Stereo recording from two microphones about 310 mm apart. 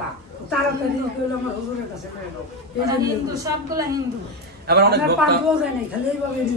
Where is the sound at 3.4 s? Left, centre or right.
Centre.